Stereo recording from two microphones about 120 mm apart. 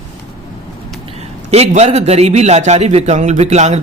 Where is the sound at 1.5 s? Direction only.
60° right (ahead or behind).